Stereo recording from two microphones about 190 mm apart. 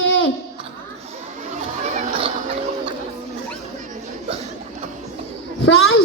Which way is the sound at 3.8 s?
35° right (ahead or behind).